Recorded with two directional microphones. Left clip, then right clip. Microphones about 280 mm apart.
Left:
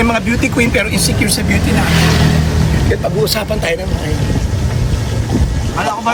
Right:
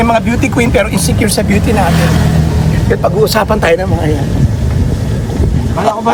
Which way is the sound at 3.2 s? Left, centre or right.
Centre.